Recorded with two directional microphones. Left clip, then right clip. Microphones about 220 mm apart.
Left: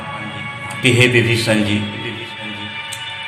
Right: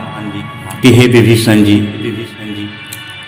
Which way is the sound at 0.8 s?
50° right (ahead or behind).